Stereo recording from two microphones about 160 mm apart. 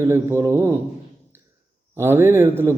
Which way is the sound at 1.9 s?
15° right (ahead or behind).